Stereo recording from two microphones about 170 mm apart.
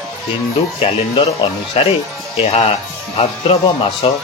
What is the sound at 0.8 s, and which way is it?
Speech, 35° left (ahead or behind).